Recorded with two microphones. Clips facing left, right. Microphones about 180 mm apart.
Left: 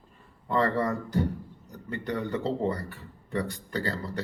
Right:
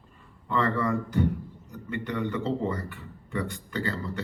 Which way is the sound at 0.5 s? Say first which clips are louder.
Even; 35° left (ahead or behind).